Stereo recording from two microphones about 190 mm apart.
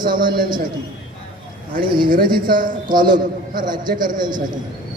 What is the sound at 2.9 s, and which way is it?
Speech, 25° right (ahead or behind).